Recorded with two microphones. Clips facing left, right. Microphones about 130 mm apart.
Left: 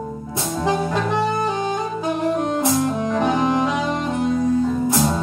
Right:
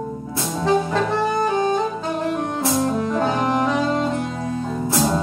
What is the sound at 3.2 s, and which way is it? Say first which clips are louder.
Music: left 3 dB; 15° left (ahead or behind).